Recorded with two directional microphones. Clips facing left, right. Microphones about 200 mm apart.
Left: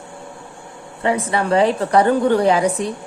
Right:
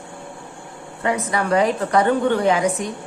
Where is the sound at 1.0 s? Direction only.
30° left (ahead or behind).